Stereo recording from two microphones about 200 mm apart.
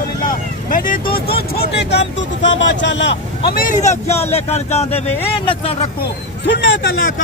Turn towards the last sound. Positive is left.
turn(degrees=65)  # may be behind; listen again after turning